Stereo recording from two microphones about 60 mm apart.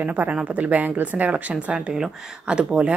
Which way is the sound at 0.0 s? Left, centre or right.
Right.